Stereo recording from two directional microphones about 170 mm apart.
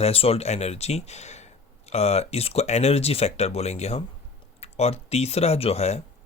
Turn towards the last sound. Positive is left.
turn(degrees=40)  # may be behind; listen again after turning